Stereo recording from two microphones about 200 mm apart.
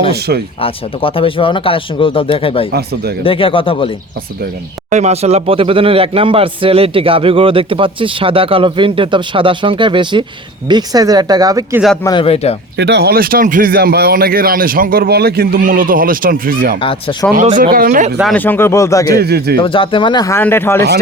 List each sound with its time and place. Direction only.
0.6 s speech: 25° left (ahead or behind)
2.7 s speech: 50° right (ahead or behind)
3.2 s speech: 25° left (ahead or behind)
4.9 s speech: 35° right (ahead or behind); by 11.8 s 20° right (ahead or behind)
12.0 s speech: 25° left (ahead or behind)
12.7 s speech: 60° right (ahead or behind)
16.8 s speech: 25° left (ahead or behind)
17.6 s speech: 45° right (ahead or behind)
18.2 s speech: 5° left (ahead or behind)
19.2 s speech: 55° right (ahead or behind)
19.5 s speech: 25° left (ahead or behind)